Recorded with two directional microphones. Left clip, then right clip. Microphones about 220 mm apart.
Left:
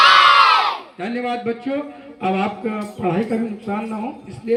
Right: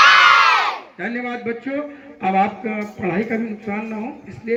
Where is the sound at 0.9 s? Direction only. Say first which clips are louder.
Left 2 dB; 15° left (ahead or behind).